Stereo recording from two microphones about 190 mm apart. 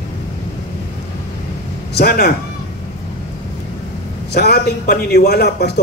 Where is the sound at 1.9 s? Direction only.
55° left (ahead or behind).